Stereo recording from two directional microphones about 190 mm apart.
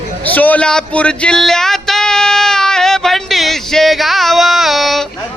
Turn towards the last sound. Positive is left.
turn(degrees=0)  # may be behind; listen again after turning